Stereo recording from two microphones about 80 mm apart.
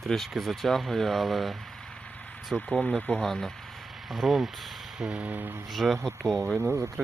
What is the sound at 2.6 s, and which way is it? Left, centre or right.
Speech, centre.